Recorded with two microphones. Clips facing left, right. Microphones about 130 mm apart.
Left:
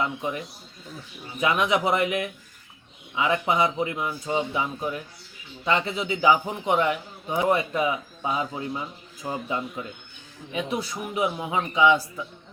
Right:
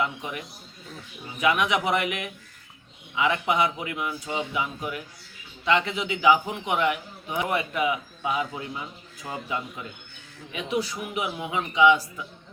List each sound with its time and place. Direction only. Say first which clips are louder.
0.0 s a man's voice: left 2 dB; 30° left (ahead or behind)
10.5 s a man's voice: even; 35° left (ahead or behind)